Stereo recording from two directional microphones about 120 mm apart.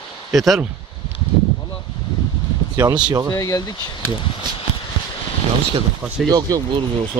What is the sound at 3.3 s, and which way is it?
Speech, 25° left (ahead or behind).